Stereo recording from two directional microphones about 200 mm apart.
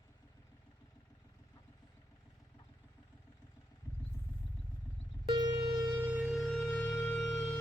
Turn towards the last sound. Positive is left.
turn(degrees=5)  # may be behind; listen again after turning